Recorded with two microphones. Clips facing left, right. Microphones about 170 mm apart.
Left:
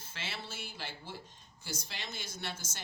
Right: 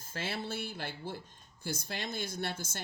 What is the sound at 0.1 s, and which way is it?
Speech, 50° right (ahead or behind).